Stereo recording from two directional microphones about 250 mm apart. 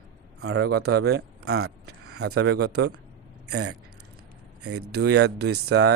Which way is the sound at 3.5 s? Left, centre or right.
Right.